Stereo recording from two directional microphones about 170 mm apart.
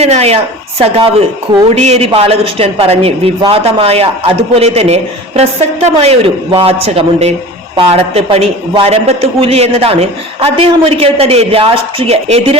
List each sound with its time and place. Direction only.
0.0 s a man's voice: 40° right (ahead or behind)